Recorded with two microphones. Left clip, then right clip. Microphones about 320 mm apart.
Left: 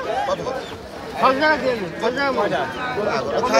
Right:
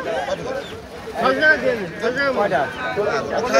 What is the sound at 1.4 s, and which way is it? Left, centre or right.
Speech, left.